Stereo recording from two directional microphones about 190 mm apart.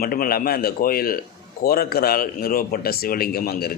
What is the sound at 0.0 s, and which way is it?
Speech, 50° left (ahead or behind).